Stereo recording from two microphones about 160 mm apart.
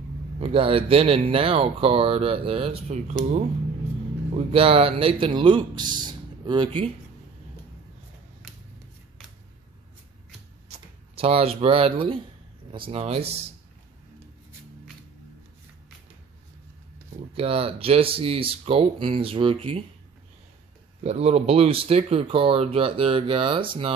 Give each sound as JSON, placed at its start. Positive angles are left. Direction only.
{"t": 0.4, "sound": "speech", "side_deg": -35}
{"t": 4.3, "sound": "speech", "side_deg": -35}
{"t": 6.0, "sound": "a sound", "side_deg": -30}
{"t": 10.7, "sound": "speech", "side_deg": -35}
{"t": 17.4, "sound": "speech", "side_deg": -35}
{"t": 21.0, "sound": "speech", "side_deg": -40}